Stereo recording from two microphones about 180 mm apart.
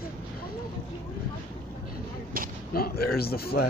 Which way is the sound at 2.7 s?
55° left (ahead or behind).